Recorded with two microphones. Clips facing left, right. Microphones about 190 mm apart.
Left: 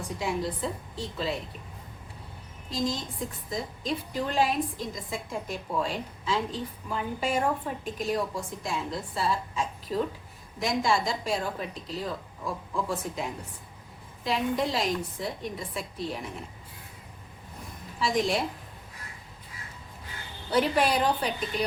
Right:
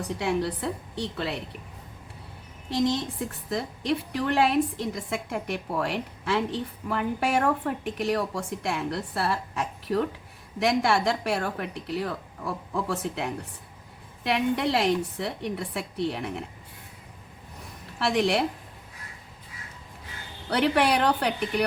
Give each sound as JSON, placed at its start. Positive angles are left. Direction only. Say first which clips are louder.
{"t": 0.2, "sound": "a woman's voice", "louder": "right 2 dB", "side_deg": -70}
{"t": 2.6, "sound": "a woman's voice", "louder": "right 5 dB", "side_deg": -70}
{"t": 18.0, "sound": "a woman's voice", "louder": "right 3 dB", "side_deg": -70}
{"t": 20.5, "sound": "a woman's voice", "louder": "right 2 dB", "side_deg": -70}